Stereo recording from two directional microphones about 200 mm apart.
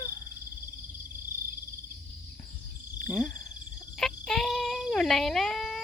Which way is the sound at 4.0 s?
Centre (ahead or behind).